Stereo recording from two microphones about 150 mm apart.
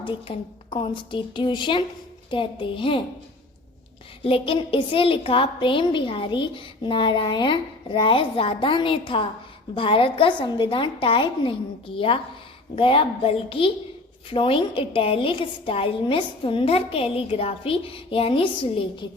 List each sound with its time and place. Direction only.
0.0 s a woman's voice: 35° left (ahead or behind)
4.2 s a woman's voice: 35° left (ahead or behind)